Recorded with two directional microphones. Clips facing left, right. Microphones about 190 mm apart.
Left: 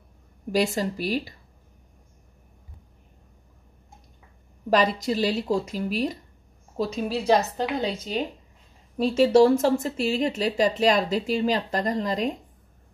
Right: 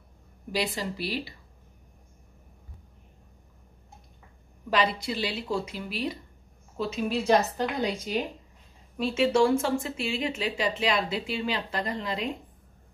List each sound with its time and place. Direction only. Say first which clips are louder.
0.5 s a woman's voice: left 6 dB; 45° left (ahead or behind)
4.6 s a woman's voice: left 5 dB; 40° left (ahead or behind)